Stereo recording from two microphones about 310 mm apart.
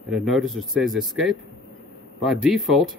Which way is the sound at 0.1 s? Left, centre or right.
Centre.